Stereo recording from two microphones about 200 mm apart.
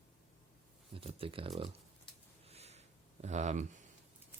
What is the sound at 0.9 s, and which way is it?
Speech, 30° right (ahead or behind).